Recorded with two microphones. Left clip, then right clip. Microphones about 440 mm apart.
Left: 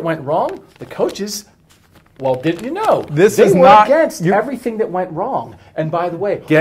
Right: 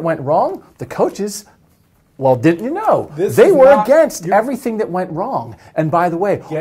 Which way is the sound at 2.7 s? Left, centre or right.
Right.